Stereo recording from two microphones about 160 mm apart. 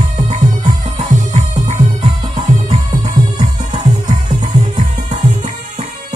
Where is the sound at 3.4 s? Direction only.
45° right (ahead or behind).